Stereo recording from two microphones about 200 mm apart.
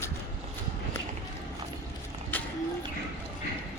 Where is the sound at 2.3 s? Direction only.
10° left (ahead or behind).